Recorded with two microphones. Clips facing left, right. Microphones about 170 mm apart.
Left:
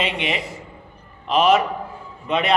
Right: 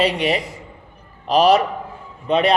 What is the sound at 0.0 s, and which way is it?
A man's voice, 40° right (ahead or behind).